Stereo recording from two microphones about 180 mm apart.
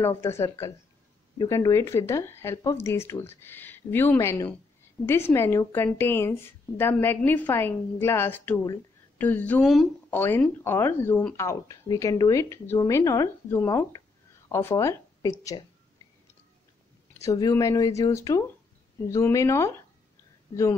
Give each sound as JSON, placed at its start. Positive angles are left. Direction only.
{"t": 0.0, "sound": "speech", "side_deg": 15}
{"t": 17.2, "sound": "speech", "side_deg": 20}